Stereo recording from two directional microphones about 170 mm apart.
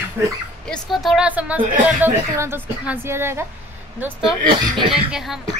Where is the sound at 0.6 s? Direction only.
5° left (ahead or behind).